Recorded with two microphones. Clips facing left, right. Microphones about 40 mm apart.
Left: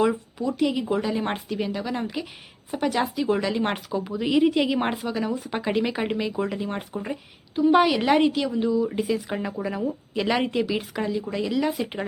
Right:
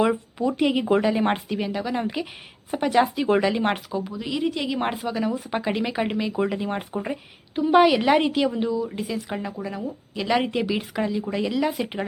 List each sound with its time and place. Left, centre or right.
0.0 s speech: right
1.1 s speech: centre
3.9 s speech: centre
6.3 s speech: centre
7.6 s speech: centre
8.9 s speech: centre